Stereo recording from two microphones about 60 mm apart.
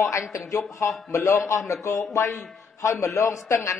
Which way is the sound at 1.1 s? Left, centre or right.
Left.